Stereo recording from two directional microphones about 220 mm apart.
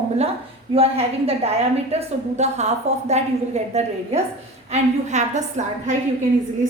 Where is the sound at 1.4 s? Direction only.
30° right (ahead or behind).